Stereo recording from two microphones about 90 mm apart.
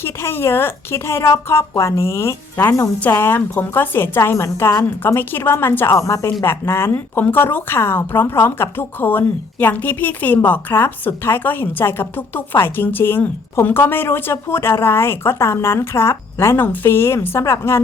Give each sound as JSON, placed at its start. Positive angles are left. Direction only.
{"t": 0.0, "sound": "speech", "side_deg": 25}